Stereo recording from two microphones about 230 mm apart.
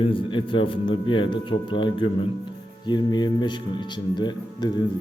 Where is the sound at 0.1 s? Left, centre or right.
Left.